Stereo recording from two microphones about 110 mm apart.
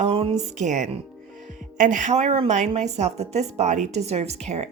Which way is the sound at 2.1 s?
75° right (ahead or behind).